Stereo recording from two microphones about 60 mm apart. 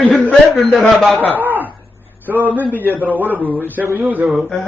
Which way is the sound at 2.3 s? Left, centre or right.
Right.